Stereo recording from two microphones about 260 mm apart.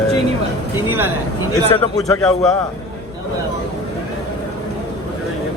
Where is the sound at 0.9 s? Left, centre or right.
Centre.